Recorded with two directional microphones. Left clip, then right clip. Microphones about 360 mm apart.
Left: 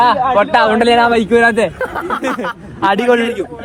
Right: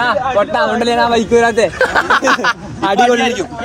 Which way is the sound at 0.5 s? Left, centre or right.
Left.